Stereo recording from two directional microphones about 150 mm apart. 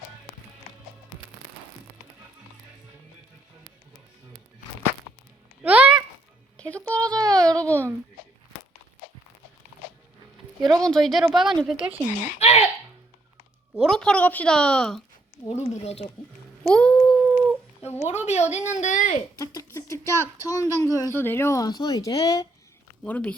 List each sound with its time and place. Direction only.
5.6 s a sound: 10° right (ahead or behind)
6.6 s speech: 10° left (ahead or behind)
7.1 s a sound: 25° right (ahead or behind)
7.6 s babbling: 10° left (ahead or behind)
10.6 s speech: 25° right (ahead or behind)
10.8 s speech: centre (ahead or behind)
12.4 s a sound: 45° left (ahead or behind)
13.8 s a woman's voice: 5° left (ahead or behind)
15.4 s a woman's voice: 45° left (ahead or behind)
16.6 s a sound: 5° left (ahead or behind)
17.2 s dog: 10° right (ahead or behind)
18.3 s a woman's voice: 50° left (ahead or behind)
19.4 s speech: 20° left (ahead or behind)
23.0 s a woman's voice: 10° left (ahead or behind)